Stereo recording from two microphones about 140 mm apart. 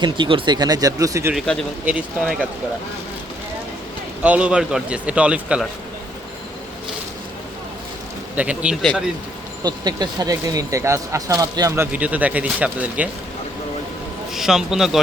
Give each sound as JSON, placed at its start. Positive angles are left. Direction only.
{"t": 0.0, "sound": "speech", "side_deg": -35}
{"t": 1.8, "sound": "a man's voice", "side_deg": -10}
{"t": 4.2, "sound": "a man's voice", "side_deg": -10}
{"t": 8.4, "sound": "a man's voice", "side_deg": -10}
{"t": 9.6, "sound": "speech", "side_deg": -30}
{"t": 14.3, "sound": "a man's voice", "side_deg": -5}